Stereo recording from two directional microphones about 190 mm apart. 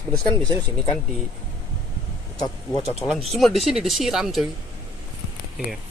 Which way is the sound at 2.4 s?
20° left (ahead or behind).